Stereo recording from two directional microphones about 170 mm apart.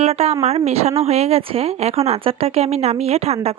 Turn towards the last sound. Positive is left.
turn(degrees=-35)  # may be behind; listen again after turning